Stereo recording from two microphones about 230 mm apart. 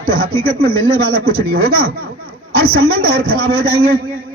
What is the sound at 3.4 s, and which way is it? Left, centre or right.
Speech, right.